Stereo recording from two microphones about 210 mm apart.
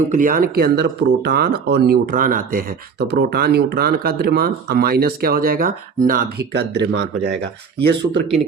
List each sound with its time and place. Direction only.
0.1 s speech: 40° right (ahead or behind)